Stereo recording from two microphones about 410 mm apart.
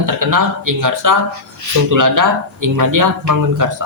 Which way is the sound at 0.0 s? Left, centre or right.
Right.